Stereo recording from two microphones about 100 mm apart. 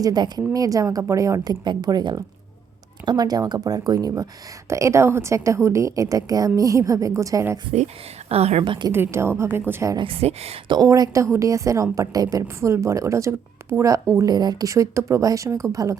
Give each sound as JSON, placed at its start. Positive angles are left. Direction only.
{"t": 0.0, "sound": "a woman's voice", "side_deg": -40}
{"t": 1.6, "sound": "a woman's voice", "side_deg": -45}
{"t": 8.3, "sound": "a woman's voice", "side_deg": -90}
{"t": 8.6, "sound": "a woman's voice", "side_deg": -55}
{"t": 8.9, "sound": "a woman's voice", "side_deg": -25}
{"t": 10.0, "sound": "speech", "side_deg": -75}
{"t": 10.8, "sound": "a woman's voice", "side_deg": -35}
{"t": 14.2, "sound": "a woman's voice", "side_deg": -40}